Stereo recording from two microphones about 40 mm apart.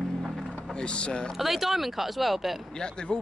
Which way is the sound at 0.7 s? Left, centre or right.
Left.